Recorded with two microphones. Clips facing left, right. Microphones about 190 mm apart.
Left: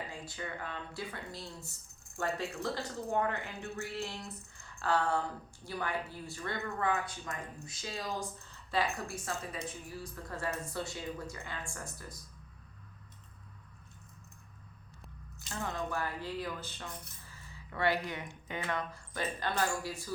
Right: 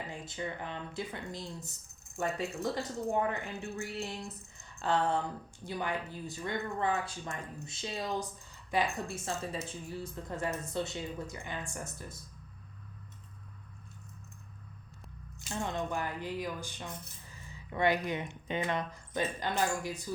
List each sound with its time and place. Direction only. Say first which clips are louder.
0.1 s speech: right 3 dB; 20° right (ahead or behind)
3.6 s a sound: right 1 dB; 25° right (ahead or behind)
5.6 s a woman's voice: right 1 dB; 20° right (ahead or behind)
15.5 s speech: right 2 dB; 20° right (ahead or behind)